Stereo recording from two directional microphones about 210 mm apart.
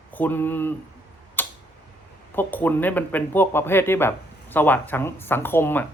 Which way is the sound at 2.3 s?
10° left (ahead or behind).